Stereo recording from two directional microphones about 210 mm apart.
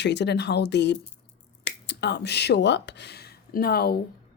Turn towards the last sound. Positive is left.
turn(degrees=45)  # may be behind; listen again after turning